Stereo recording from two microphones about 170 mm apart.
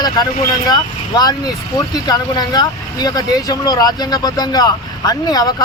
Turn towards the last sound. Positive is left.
turn(degrees=20)  # may be behind; listen again after turning